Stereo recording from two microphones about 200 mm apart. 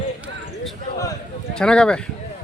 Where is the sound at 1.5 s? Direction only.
5° left (ahead or behind).